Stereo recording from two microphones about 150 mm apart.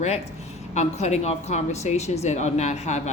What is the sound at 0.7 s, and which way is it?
A woman's voice, 50° left (ahead or behind).